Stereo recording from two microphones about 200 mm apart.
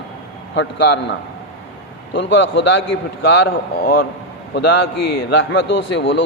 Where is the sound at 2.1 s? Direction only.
65° left (ahead or behind).